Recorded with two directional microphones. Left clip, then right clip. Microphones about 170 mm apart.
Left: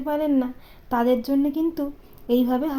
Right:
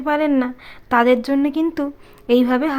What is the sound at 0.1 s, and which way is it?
A woman's voice, 15° right (ahead or behind).